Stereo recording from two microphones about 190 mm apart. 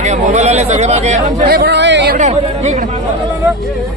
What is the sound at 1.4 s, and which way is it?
Speech, 60° right (ahead or behind).